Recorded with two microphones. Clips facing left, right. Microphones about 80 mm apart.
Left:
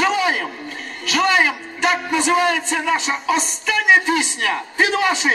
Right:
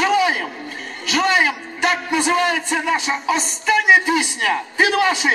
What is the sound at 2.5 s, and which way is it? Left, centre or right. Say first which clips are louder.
Speech: even; centre.